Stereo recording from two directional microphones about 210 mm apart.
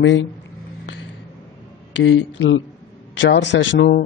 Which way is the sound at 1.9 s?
65° left (ahead or behind).